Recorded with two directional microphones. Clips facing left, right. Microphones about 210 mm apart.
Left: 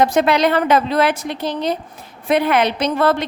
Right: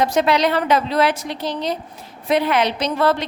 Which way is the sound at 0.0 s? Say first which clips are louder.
Left 2 dB; 55° left (ahead or behind).